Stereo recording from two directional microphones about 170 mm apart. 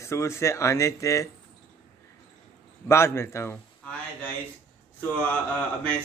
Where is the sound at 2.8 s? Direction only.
15° left (ahead or behind).